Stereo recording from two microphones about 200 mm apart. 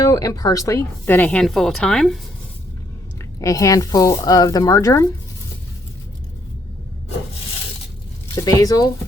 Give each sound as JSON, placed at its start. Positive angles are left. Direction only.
{"t": 0.0, "sound": "speech", "side_deg": 15}
{"t": 3.4, "sound": "speech", "side_deg": 15}
{"t": 8.4, "sound": "speech", "side_deg": 15}